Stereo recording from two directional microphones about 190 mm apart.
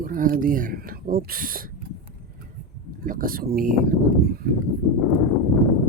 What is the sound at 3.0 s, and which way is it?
Speech, 45° right (ahead or behind).